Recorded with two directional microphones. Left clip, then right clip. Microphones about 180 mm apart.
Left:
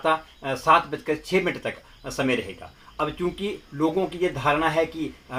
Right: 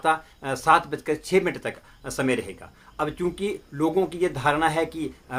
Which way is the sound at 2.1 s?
15° right (ahead or behind).